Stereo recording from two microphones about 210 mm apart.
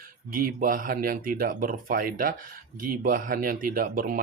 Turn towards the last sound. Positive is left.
turn(degrees=-40)  # may be behind; listen again after turning